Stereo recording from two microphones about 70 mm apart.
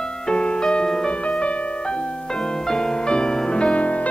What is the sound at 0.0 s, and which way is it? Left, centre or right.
Music, centre.